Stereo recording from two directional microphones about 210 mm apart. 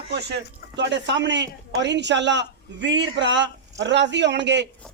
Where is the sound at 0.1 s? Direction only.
55° right (ahead or behind).